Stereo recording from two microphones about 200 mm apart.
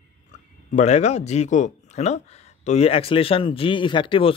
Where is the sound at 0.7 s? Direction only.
35° left (ahead or behind).